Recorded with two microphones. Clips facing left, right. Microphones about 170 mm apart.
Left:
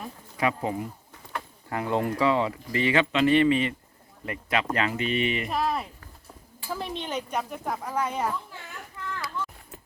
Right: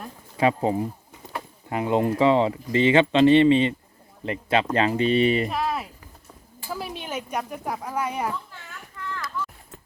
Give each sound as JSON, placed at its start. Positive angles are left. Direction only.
{"t": 0.3, "sound": "speech", "side_deg": -30}
{"t": 5.5, "sound": "a sound", "side_deg": 0}
{"t": 6.7, "sound": "speech", "side_deg": -5}